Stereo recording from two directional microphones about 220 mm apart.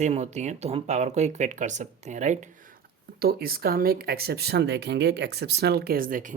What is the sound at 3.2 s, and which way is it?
Speech, 45° right (ahead or behind).